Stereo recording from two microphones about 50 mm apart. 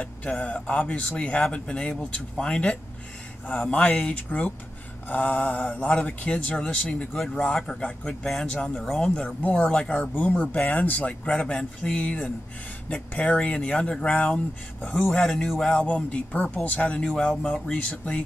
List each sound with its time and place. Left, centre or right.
0.4 s speech: left
8.5 s speech: centre
9.2 s speech: left
9.6 s speech: centre
10.1 s speech: left
12.8 s speech: left
13.6 s speech: centre
14.8 s speech: left
15.0 s speech: centre
15.8 s speech: left
17.0 s speech: centre